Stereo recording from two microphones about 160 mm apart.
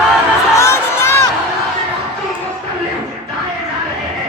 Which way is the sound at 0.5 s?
15° left (ahead or behind).